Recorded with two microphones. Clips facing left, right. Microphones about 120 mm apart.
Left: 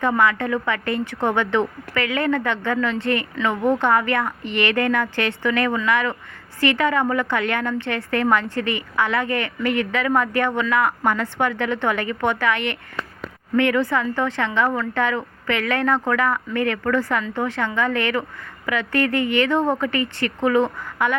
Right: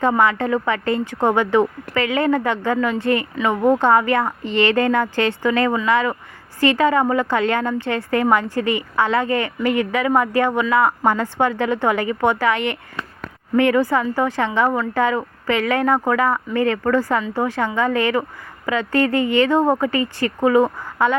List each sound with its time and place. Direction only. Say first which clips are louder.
0.0 s speech: right 2 dB; 25° right (ahead or behind)